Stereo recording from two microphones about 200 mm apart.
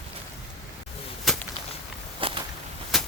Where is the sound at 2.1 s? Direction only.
25° right (ahead or behind).